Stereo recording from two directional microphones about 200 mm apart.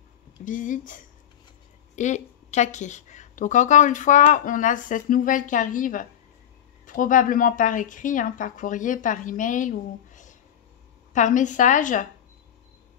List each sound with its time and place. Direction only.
0.5 s a woman's voice: 40° left (ahead or behind)